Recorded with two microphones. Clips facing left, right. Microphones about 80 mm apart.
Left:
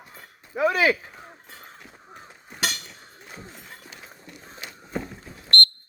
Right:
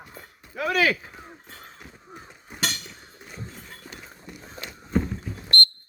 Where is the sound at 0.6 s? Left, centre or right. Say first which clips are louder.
Left 2 dB; left.